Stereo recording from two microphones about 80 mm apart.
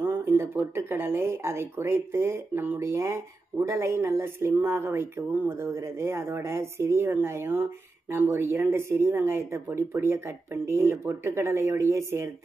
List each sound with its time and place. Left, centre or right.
0.0 s speech: right